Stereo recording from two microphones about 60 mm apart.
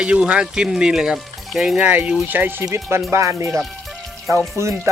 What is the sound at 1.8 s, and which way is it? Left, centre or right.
Speech, right.